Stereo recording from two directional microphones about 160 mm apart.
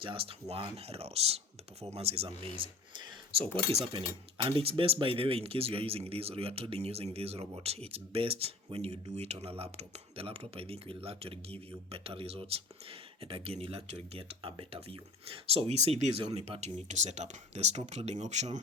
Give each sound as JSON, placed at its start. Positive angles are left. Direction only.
{"t": 0.0, "sound": "speech", "side_deg": -35}